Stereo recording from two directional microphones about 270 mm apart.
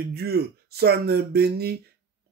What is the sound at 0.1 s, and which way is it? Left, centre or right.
Speech, right.